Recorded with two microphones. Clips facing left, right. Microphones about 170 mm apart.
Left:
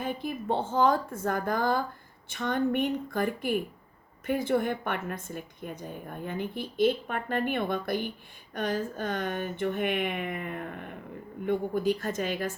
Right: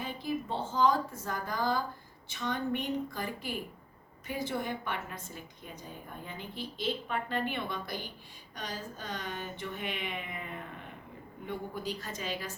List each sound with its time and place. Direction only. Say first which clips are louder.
0.0 s a woman's voice: left 3 dB; 55° left (ahead or behind)